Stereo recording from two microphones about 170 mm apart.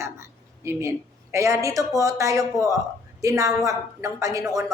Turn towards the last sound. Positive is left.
turn(degrees=-20)  # may be behind; listen again after turning